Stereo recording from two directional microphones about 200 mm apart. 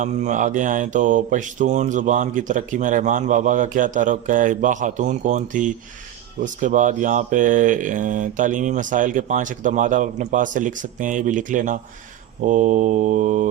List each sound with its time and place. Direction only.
0.0 s mantra: 40° right (ahead or behind)